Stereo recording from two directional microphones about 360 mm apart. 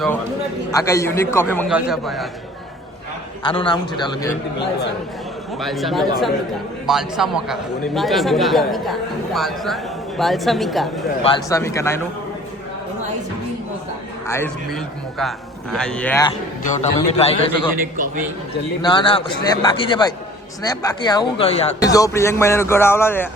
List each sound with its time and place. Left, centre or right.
0.7 s speech: centre
3.4 s speech: centre
5.5 s a man's voice: centre
11.2 s speech: centre
14.3 s a man's voice: centre
17.9 s a man's voice: right
18.8 s speech: centre